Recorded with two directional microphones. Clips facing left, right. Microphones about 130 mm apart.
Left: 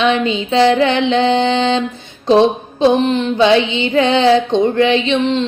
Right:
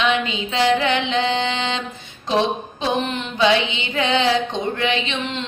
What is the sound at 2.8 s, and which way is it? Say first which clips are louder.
Mantra: left 11 dB; 30° left (ahead or behind).